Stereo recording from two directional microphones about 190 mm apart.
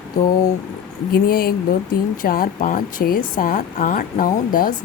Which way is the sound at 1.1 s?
50° left (ahead or behind).